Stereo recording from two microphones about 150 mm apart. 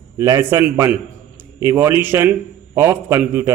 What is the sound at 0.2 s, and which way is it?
A man's voice, 20° right (ahead or behind).